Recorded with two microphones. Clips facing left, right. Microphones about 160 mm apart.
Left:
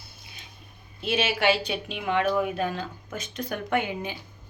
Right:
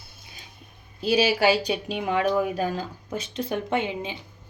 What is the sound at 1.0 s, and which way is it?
Speech, 35° right (ahead or behind).